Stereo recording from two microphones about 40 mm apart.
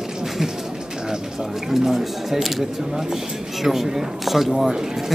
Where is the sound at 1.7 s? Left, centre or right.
Centre.